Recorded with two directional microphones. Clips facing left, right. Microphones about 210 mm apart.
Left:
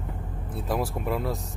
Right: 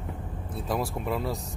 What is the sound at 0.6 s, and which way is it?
Speech, centre (ahead or behind).